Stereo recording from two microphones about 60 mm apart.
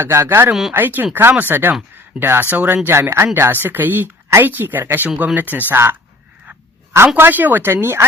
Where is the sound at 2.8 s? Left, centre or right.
Right.